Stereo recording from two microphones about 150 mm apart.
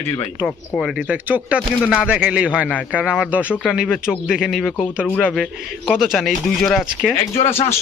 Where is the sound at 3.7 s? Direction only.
5° right (ahead or behind).